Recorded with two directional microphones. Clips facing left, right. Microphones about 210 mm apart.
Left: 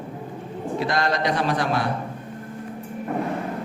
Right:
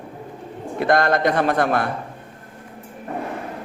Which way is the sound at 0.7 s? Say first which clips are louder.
Right 6 dB; 55° right (ahead or behind).